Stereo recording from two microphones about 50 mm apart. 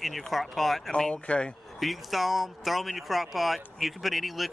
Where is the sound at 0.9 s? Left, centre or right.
Centre.